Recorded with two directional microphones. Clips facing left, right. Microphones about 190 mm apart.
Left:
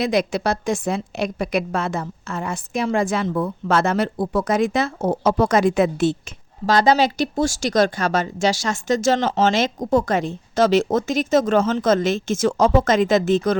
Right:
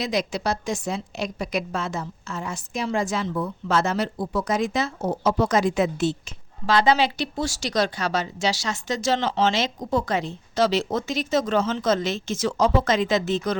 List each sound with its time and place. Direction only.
0.0 s a woman's voice: 55° left (ahead or behind)
6.7 s speech: 40° left (ahead or behind)